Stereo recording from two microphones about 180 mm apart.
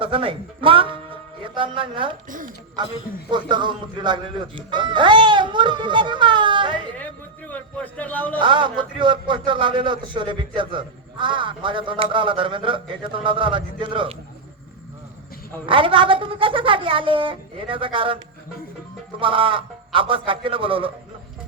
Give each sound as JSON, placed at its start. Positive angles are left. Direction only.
{"t": 0.0, "sound": "a man's voice", "side_deg": -30}
{"t": 7.0, "sound": "a man's voice", "side_deg": 10}
{"t": 8.4, "sound": "a man's voice", "side_deg": -25}
{"t": 15.6, "sound": "a man's voice", "side_deg": -30}
{"t": 19.2, "sound": "a man's voice", "side_deg": -30}